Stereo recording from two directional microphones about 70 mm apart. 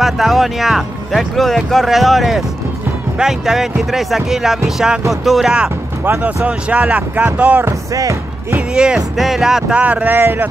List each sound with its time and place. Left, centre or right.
0.0 s speech: centre
6.2 s speech: centre
7.6 s speech: right
8.5 s speech: centre
9.8 s speech: centre